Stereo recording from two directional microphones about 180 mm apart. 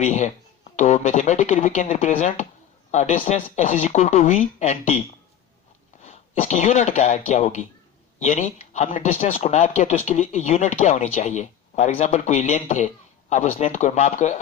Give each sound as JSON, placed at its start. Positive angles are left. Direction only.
{"t": 0.0, "sound": "speech", "side_deg": 40}
{"t": 6.0, "sound": "a man's voice", "side_deg": 35}